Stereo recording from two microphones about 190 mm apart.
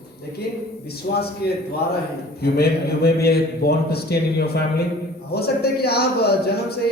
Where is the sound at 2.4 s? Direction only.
55° left (ahead or behind).